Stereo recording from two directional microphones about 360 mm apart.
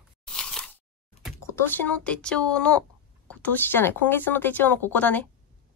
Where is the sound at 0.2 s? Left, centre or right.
Centre.